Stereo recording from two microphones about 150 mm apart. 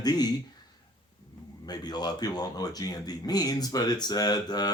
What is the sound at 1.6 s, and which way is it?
Speech, 25° left (ahead or behind).